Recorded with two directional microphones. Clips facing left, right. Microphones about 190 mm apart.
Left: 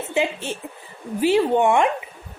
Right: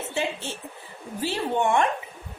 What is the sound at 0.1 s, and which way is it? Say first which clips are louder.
A woman's voice: left 7 dB; 15° left (ahead or behind).